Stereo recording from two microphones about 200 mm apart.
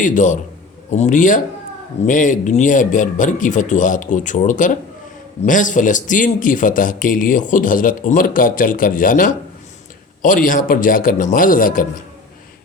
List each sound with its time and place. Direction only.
0.0 s a man's voice: 40° left (ahead or behind)